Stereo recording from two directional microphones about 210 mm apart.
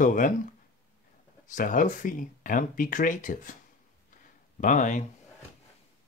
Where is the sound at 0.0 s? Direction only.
40° left (ahead or behind).